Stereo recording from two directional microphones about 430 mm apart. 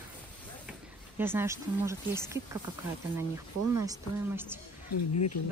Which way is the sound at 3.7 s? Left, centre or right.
Centre.